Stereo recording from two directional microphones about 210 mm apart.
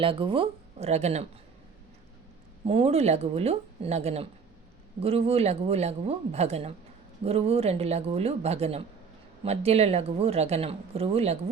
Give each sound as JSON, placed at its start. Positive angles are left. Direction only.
{"t": 0.0, "sound": "speech", "side_deg": -25}
{"t": 2.6, "sound": "speech", "side_deg": -30}